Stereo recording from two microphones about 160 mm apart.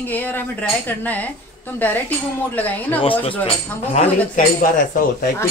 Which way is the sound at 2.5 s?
10° left (ahead or behind).